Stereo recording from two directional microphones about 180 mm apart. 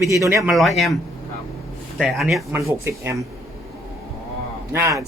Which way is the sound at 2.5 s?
15° right (ahead or behind).